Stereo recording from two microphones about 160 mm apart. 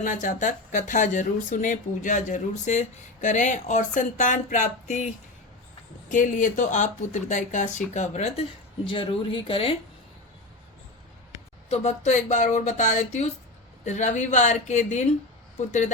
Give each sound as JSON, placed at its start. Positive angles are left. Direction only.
{"t": 0.0, "sound": "speech", "side_deg": 50}
{"t": 6.1, "sound": "speech", "side_deg": 55}
{"t": 8.9, "sound": "speech", "side_deg": 35}
{"t": 11.7, "sound": "speech", "side_deg": 45}